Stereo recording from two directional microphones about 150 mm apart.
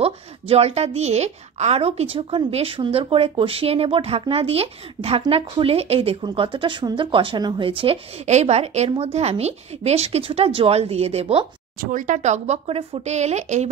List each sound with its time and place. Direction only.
0.0 s a woman's voice: 40° right (ahead or behind)
11.8 s speech: 60° right (ahead or behind)